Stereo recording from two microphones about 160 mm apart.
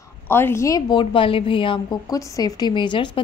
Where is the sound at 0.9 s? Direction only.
35° left (ahead or behind).